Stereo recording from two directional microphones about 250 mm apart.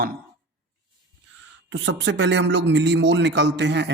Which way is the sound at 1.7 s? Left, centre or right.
Right.